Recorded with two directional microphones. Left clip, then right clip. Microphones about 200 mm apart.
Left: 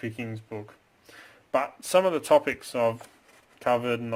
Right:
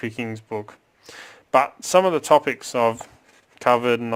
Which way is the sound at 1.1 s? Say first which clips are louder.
Right 9 dB; 40° right (ahead or behind).